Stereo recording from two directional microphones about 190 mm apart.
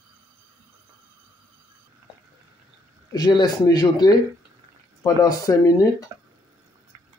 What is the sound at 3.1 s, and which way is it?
A man's voice, 20° left (ahead or behind).